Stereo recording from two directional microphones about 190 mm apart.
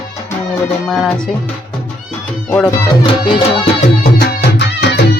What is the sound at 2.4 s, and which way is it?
Speech, 5° left (ahead or behind).